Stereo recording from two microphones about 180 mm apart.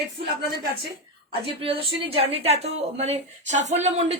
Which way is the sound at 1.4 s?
30° right (ahead or behind).